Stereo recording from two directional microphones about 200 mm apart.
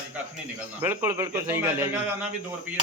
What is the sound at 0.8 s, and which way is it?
A man's voice, 10° right (ahead or behind).